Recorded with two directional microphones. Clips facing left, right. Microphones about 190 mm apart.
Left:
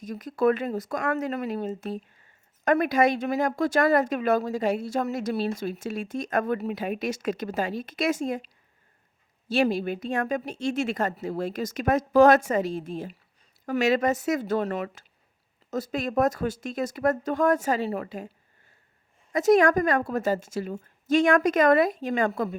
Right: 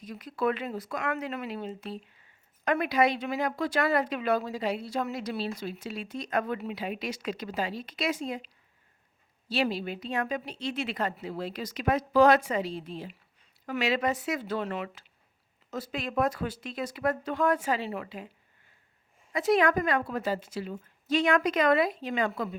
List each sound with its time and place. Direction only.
0.0 s speech: 45° left (ahead or behind)
9.5 s speech: 50° left (ahead or behind)
19.3 s speech: 45° left (ahead or behind)